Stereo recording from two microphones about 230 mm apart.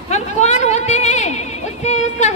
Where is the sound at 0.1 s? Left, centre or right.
Left.